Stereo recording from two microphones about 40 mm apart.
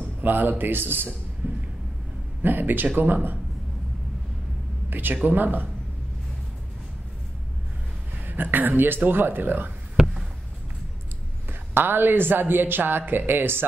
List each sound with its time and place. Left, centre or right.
0.2 s speech: right
1.4 s a sound: right
2.4 s speech: right
4.8 s speech: right
8.3 s speech: right
11.4 s speech: right